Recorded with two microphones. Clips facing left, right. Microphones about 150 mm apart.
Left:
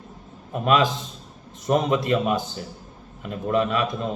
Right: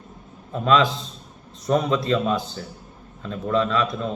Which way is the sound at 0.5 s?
15° left (ahead or behind).